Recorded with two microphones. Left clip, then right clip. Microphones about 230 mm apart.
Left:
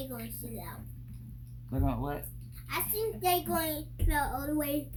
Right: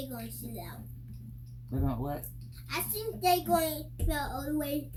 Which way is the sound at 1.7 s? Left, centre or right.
Left.